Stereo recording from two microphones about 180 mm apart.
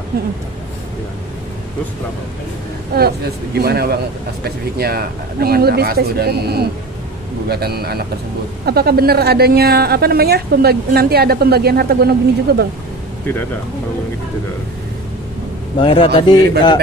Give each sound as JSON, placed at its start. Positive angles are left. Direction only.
{"t": 3.0, "sound": "a woman's voice", "side_deg": -60}
{"t": 15.8, "sound": "a man's voice", "side_deg": 30}